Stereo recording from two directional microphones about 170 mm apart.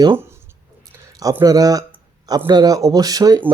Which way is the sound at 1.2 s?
20° right (ahead or behind).